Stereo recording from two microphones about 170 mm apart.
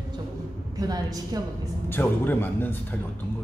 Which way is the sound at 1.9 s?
10° left (ahead or behind).